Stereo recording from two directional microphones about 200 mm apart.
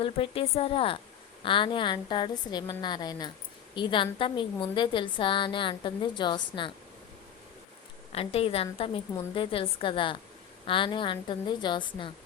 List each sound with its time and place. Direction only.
0.0 s a woman's voice: 25° left (ahead or behind)
8.1 s a woman's voice: 30° left (ahead or behind)